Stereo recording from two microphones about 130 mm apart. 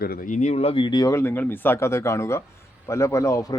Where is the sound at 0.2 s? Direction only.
70° left (ahead or behind); by 0.9 s 50° left (ahead or behind).